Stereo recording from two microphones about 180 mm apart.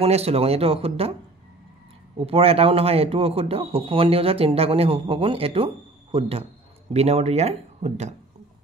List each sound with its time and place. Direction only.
0.0 s a man's voice: 35° right (ahead or behind)
2.2 s a man's voice: 35° right (ahead or behind)